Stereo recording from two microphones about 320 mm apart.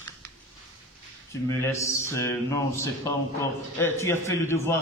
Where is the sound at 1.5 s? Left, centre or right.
Centre.